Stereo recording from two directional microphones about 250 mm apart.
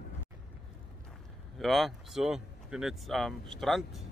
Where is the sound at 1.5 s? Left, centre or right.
Centre.